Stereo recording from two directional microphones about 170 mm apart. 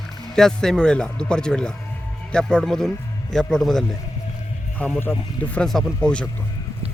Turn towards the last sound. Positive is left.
turn(degrees=5)  # may be behind; listen again after turning